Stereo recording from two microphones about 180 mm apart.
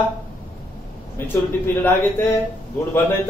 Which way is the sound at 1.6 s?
10° left (ahead or behind).